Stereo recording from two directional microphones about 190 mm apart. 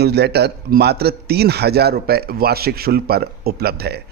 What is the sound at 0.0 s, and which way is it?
A man's voice, 60° right (ahead or behind).